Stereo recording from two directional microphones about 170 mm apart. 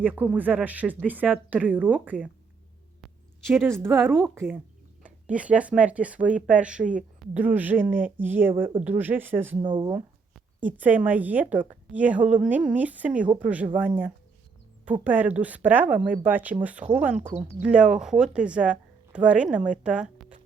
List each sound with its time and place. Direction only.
0.0 s speech: 10° right (ahead or behind)
3.5 s speech: 15° right (ahead or behind)
9.6 s speech: 30° right (ahead or behind)
10.3 s speech: 10° right (ahead or behind)